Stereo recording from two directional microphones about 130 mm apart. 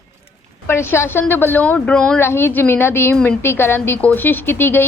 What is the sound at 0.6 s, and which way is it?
A woman's voice, 20° left (ahead or behind).